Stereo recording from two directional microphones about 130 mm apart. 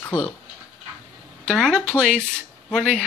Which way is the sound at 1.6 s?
5° left (ahead or behind).